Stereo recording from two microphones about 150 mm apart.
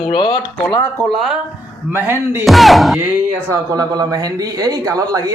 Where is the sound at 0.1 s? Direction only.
30° left (ahead or behind).